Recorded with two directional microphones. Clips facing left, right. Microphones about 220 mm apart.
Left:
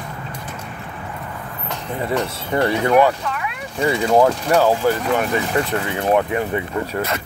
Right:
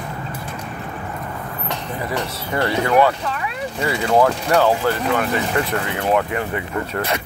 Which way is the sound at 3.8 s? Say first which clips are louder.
Left 2 dB; 20° left (ahead or behind).